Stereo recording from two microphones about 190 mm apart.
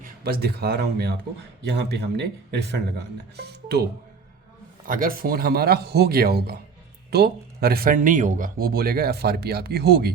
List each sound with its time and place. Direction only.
0.0 s speech: 55° right (ahead or behind)
4.9 s speech: 50° right (ahead or behind)